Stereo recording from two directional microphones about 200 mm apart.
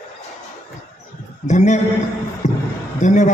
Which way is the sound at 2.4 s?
35° left (ahead or behind).